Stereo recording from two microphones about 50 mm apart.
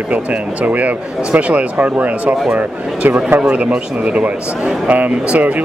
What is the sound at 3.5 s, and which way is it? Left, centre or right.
Speech, right.